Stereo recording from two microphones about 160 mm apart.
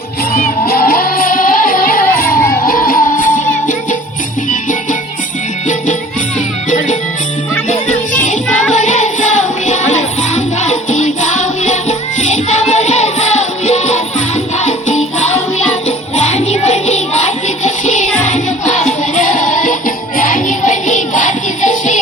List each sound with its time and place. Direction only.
0.7 s music: 70° left (ahead or behind)
6.7 s music: 50° left (ahead or behind)